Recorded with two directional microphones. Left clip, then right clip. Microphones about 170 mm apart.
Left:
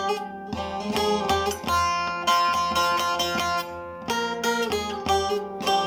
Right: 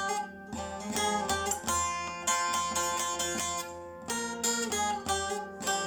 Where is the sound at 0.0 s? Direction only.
15° left (ahead or behind).